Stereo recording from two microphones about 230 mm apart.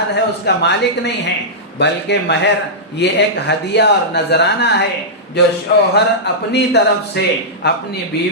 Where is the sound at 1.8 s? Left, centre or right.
Left.